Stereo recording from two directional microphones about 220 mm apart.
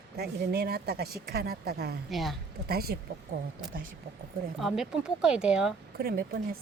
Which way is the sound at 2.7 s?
45° right (ahead or behind).